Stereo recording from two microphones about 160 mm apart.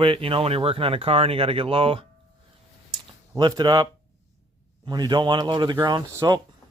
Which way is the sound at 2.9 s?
25° right (ahead or behind).